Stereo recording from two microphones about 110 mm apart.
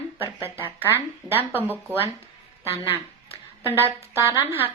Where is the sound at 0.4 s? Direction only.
20° right (ahead or behind).